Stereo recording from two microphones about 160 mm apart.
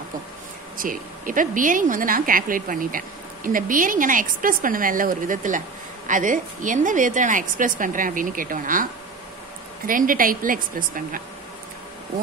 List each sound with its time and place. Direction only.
0.7 s a woman's voice: 60° right (ahead or behind)
9.8 s a woman's voice: 60° right (ahead or behind)